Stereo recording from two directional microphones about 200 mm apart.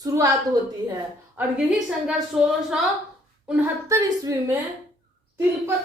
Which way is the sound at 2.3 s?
Centre (ahead or behind).